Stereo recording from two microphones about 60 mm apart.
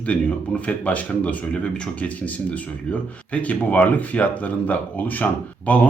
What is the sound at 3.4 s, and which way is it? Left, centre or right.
Speech, left.